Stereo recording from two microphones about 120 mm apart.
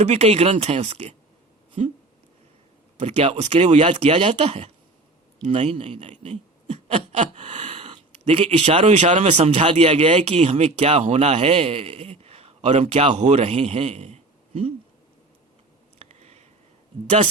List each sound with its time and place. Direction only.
0.0 s speech: 65° right (ahead or behind)
3.0 s speech: 60° right (ahead or behind)
16.0 s a sound: 65° right (ahead or behind)